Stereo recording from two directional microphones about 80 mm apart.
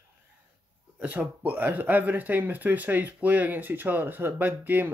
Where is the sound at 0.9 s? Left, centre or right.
Centre.